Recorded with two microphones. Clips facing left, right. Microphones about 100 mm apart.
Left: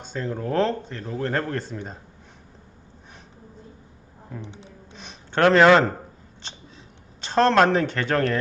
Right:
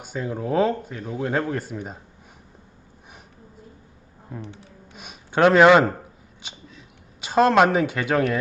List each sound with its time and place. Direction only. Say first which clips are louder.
0.0 s speech: right 1 dB; 10° right (ahead or behind)
4.4 s speech: right 1 dB; 20° left (ahead or behind)
4.9 s a sound: right 2 dB; 10° right (ahead or behind)
7.2 s speech: right 1 dB; 10° right (ahead or behind)